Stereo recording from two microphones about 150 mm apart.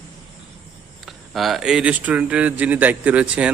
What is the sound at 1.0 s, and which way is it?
Speech, centre (ahead or behind).